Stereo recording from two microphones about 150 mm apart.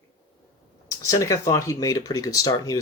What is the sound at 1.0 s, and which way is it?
Speech, 20° left (ahead or behind).